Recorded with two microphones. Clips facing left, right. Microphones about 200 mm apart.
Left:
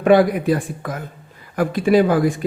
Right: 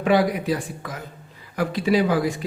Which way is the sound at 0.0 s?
50° left (ahead or behind).